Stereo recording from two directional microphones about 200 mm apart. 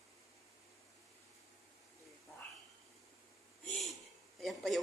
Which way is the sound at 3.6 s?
Centre (ahead or behind).